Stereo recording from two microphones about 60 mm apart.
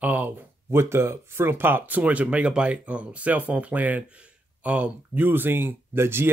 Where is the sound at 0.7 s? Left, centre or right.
Right.